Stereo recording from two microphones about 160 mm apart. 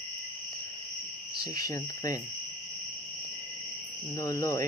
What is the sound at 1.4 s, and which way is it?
Speech, 25° left (ahead or behind).